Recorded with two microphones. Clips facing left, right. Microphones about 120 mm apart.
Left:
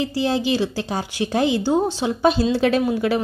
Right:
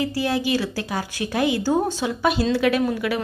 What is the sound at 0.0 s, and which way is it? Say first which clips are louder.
Speech: left 2 dB; 25° left (ahead or behind).